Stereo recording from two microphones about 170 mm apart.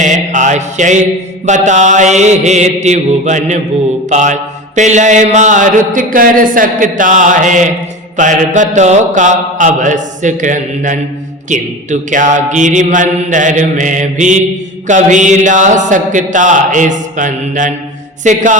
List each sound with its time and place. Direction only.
0.0 s mantra: 45° right (ahead or behind)